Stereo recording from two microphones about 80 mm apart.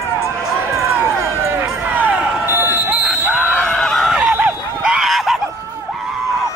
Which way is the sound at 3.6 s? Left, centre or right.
Centre.